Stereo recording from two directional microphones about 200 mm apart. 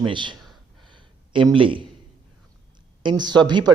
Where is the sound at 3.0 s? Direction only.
20° right (ahead or behind).